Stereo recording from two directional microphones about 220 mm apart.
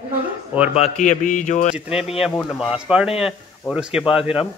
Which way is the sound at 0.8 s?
35° left (ahead or behind).